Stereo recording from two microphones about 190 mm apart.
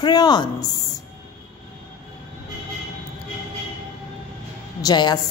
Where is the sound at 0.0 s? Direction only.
20° left (ahead or behind).